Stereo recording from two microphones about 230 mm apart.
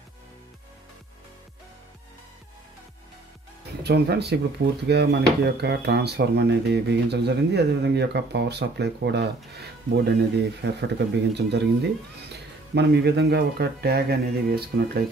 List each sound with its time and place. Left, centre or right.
3.8 s speech: right